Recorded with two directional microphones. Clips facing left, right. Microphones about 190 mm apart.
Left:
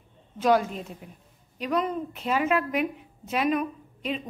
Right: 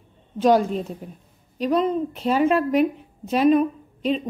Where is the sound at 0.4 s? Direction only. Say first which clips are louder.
Right 5 dB; 30° right (ahead or behind).